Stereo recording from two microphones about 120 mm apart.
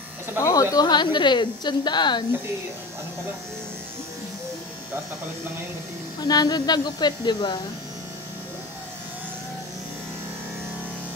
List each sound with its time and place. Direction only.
0.4 s speech: 30° left (ahead or behind)
6.2 s speech: 35° left (ahead or behind)